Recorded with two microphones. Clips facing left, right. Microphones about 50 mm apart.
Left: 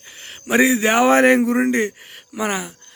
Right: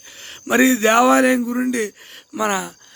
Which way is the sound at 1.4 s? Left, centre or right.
Left.